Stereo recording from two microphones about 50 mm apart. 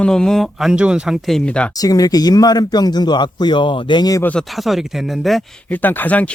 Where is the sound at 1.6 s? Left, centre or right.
Left.